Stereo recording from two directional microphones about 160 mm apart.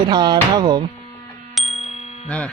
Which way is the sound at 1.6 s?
Centre (ahead or behind).